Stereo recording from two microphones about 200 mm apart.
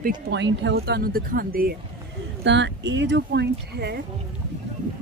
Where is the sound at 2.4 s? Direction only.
60° right (ahead or behind).